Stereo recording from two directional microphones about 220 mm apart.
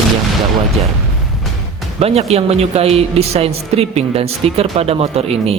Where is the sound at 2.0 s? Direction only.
30° right (ahead or behind).